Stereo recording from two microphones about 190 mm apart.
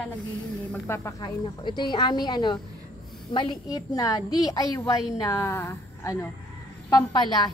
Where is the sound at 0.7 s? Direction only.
15° left (ahead or behind).